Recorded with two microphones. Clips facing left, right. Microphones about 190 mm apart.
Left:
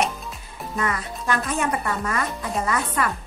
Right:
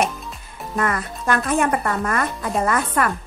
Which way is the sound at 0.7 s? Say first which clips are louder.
Right 4 dB; 55° right (ahead or behind).